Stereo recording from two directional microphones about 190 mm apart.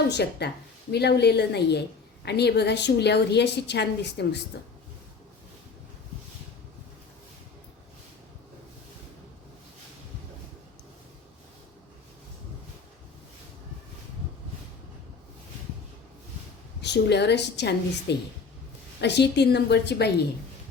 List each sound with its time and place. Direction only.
0.1 s a woman's voice: 60° left (ahead or behind)
16.8 s a woman's voice: 65° left (ahead or behind)